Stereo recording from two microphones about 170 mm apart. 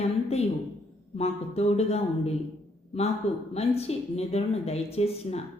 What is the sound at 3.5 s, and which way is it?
Speech, 35° left (ahead or behind).